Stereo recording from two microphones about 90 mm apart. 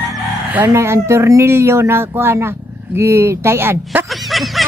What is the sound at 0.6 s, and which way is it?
Crowing, 30° right (ahead or behind).